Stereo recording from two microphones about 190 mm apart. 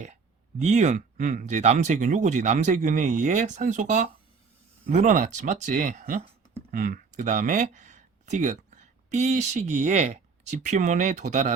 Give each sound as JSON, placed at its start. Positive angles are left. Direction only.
{"t": 0.6, "sound": "speech", "side_deg": -40}